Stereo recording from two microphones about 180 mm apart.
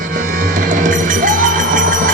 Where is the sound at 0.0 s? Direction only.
50° right (ahead or behind).